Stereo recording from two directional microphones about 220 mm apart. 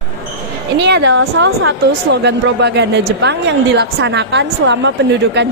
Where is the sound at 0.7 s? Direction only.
50° right (ahead or behind).